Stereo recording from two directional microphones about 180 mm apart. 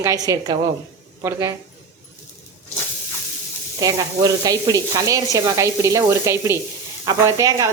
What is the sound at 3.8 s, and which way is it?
Speech, 20° right (ahead or behind).